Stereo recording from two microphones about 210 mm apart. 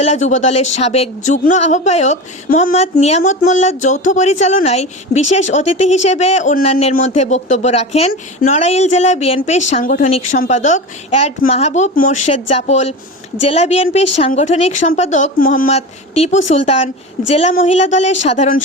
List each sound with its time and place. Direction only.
0.0 s speech: 30° left (ahead or behind)
16.1 s a woman's voice: 30° left (ahead or behind)